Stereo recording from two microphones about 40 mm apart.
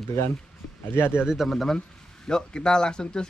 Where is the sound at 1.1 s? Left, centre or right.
Centre.